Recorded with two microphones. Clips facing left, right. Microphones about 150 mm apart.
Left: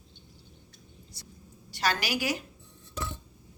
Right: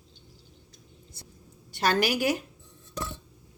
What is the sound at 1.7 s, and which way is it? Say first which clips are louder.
Speech: right 5 dB; 55° right (ahead or behind).